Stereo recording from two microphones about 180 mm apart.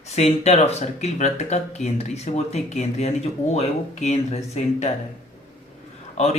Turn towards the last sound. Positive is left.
turn(degrees=40)  # may be behind; listen again after turning